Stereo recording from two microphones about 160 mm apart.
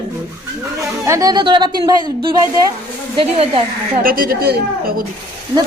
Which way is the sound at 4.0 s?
65° right (ahead or behind).